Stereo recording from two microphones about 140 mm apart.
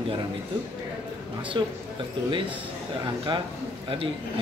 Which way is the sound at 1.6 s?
35° right (ahead or behind).